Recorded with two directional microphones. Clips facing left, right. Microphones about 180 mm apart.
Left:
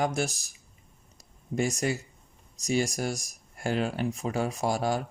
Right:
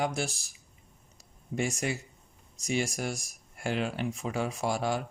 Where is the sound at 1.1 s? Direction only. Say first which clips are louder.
Left 3 dB; 40° left (ahead or behind).